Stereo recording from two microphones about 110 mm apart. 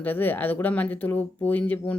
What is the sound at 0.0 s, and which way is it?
Speech, 15° left (ahead or behind).